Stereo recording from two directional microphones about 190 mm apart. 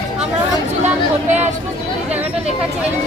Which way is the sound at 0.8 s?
35° right (ahead or behind).